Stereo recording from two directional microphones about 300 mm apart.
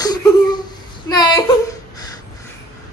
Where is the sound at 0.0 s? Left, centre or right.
Centre.